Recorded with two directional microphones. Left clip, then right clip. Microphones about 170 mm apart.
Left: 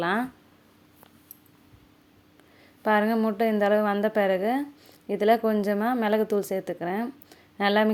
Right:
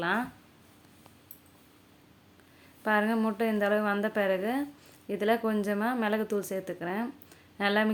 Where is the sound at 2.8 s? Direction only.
30° left (ahead or behind).